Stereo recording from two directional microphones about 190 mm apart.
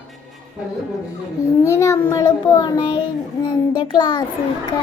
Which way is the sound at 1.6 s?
15° left (ahead or behind).